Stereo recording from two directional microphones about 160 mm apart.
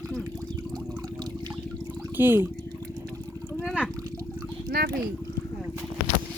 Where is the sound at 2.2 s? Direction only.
15° right (ahead or behind).